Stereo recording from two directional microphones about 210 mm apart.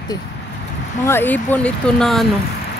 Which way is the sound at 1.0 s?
10° left (ahead or behind).